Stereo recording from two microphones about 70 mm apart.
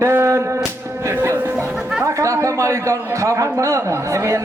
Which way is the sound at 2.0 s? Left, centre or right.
Right.